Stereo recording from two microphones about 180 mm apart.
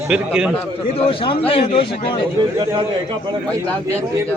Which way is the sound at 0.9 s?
30° left (ahead or behind).